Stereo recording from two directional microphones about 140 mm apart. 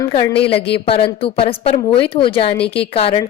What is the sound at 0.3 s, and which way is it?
Speech, 40° left (ahead or behind).